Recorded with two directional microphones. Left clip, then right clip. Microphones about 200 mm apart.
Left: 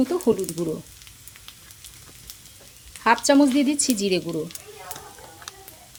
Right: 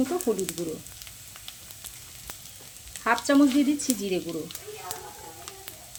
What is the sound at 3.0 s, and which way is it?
Speech, 45° left (ahead or behind).